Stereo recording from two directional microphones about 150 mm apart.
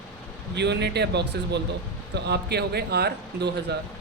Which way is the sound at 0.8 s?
90° right.